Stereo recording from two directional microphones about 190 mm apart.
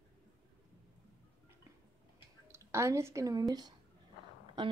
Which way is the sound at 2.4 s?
15° right (ahead or behind).